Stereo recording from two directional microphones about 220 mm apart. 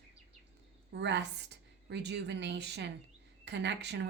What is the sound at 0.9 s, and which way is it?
A woman's voice, 50° right (ahead or behind).